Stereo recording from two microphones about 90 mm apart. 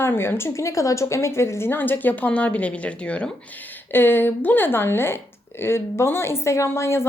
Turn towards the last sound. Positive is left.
turn(degrees=30)  # may be behind; listen again after turning